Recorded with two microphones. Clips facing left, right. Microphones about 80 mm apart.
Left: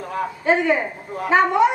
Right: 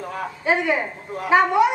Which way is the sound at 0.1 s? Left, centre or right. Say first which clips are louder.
Left 3 dB; centre.